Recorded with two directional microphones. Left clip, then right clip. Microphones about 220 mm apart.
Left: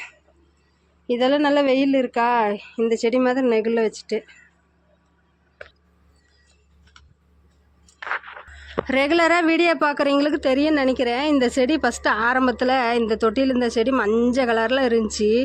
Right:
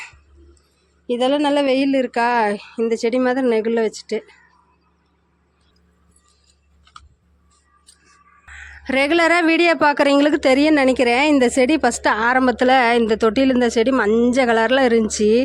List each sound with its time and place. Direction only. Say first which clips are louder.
1.0 s a woman's voice: right 1 dB; 10° right (ahead or behind)
8.8 s a woman's voice: right 2 dB; 10° right (ahead or behind)